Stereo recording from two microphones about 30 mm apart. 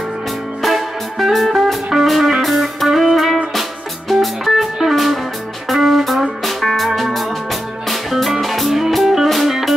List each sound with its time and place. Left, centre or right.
0.6 s music: centre